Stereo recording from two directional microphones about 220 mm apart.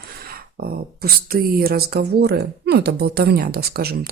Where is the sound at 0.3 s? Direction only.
45° right (ahead or behind).